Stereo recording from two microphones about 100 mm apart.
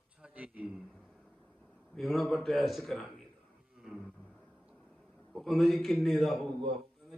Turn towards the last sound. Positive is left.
turn(degrees=0)  # may be behind; listen again after turning